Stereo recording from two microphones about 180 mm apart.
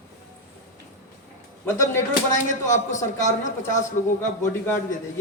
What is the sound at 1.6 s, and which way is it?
Speech, 15° left (ahead or behind).